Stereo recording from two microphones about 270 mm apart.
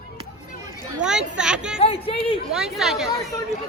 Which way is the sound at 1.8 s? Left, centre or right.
Left.